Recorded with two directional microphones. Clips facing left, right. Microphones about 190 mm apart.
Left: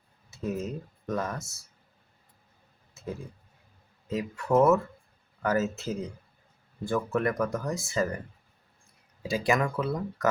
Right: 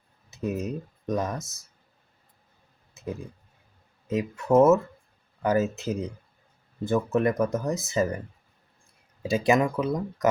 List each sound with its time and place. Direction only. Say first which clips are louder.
0.3 s speech: right 3 dB; 20° right (ahead or behind)
3.0 s a sound: right 3 dB; 20° right (ahead or behind)
4.1 s speech: right 4 dB; 20° right (ahead or behind)
9.2 s speech: right 4 dB; 25° right (ahead or behind)